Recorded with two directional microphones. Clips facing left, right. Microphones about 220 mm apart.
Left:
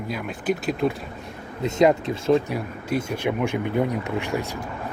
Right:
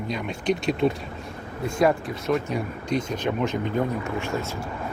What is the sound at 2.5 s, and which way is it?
Speech, 10° left (ahead or behind).